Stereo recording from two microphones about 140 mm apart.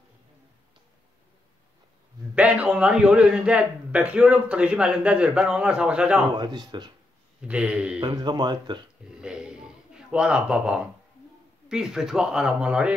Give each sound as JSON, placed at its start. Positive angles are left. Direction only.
{"t": 2.3, "sound": "a man's voice", "side_deg": -10}
{"t": 6.3, "sound": "speech", "side_deg": -30}
{"t": 7.4, "sound": "a man's voice", "side_deg": -5}
{"t": 8.0, "sound": "speech", "side_deg": -30}
{"t": 9.2, "sound": "a sound", "side_deg": -5}
{"t": 11.7, "sound": "speech", "side_deg": -5}